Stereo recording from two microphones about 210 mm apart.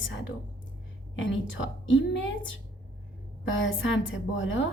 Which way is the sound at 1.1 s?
65° left (ahead or behind).